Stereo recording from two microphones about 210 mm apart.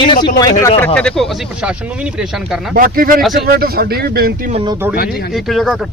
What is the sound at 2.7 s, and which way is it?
Speech, 45° right (ahead or behind).